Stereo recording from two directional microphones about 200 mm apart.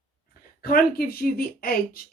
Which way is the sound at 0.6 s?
50° left (ahead or behind).